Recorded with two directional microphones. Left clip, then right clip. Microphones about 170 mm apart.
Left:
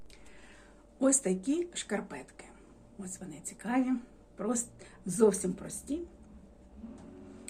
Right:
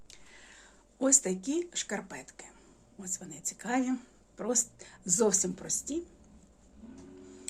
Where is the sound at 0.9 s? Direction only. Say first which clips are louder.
Right 1 dB; 35° right (ahead or behind).